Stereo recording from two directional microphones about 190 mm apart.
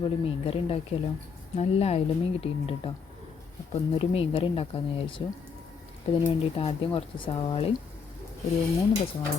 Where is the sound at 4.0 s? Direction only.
30° left (ahead or behind).